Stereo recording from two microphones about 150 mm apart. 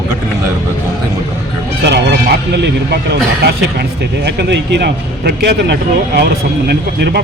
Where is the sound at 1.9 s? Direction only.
90° right.